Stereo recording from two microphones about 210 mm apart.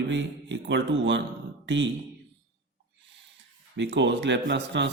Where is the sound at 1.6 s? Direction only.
60° right (ahead or behind).